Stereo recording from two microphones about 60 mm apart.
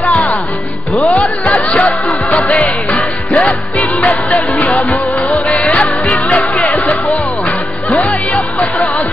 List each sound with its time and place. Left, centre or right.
0.1 s music: left
1.8 s music: left
7.9 s music: left